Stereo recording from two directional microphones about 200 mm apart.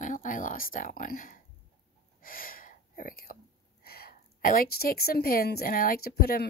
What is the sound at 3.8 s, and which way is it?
Speech, 50° left (ahead or behind).